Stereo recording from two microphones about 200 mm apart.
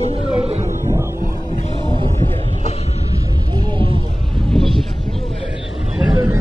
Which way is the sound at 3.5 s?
25° right (ahead or behind).